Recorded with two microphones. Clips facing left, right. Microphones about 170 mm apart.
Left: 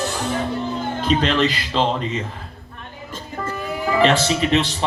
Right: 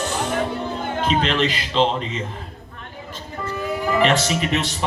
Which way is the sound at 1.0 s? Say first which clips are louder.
Left 2 dB; 35° left (ahead or behind).